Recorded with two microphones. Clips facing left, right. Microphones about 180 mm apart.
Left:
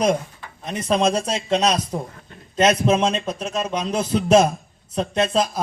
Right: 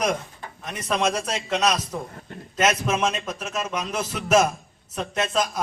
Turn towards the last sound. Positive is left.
turn(degrees=30)  # may be behind; listen again after turning